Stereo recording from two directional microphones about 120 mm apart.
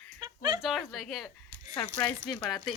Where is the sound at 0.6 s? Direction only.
Centre (ahead or behind).